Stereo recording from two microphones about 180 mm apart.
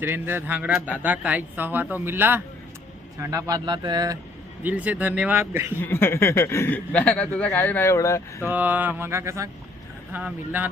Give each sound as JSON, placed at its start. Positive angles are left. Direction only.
{"t": 0.0, "sound": "a man's voice", "side_deg": -10}
{"t": 4.6, "sound": "a man's voice", "side_deg": -10}
{"t": 5.8, "sound": "speech", "side_deg": 10}
{"t": 8.4, "sound": "a man's voice", "side_deg": -10}